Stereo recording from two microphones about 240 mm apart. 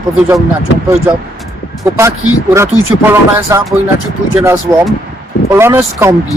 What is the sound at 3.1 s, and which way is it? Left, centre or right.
Speech, centre.